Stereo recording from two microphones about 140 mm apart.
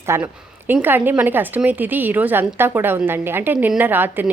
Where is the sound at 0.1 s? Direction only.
20° right (ahead or behind).